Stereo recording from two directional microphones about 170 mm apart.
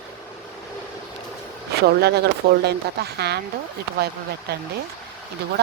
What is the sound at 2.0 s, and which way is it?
Speech, 70° right (ahead or behind).